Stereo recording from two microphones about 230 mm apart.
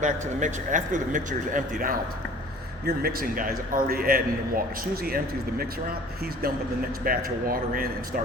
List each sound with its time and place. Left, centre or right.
0.0 s a man's voice: right
7.0 s a man's voice: right